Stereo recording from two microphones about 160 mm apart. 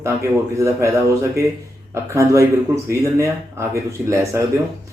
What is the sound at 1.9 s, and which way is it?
Speech, 20° right (ahead or behind).